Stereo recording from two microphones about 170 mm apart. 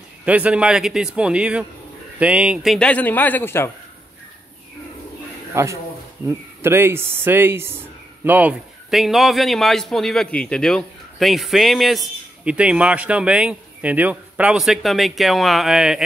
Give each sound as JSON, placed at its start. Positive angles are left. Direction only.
{"t": 0.2, "sound": "a man's voice", "side_deg": -5}
{"t": 5.5, "sound": "a man's voice", "side_deg": -15}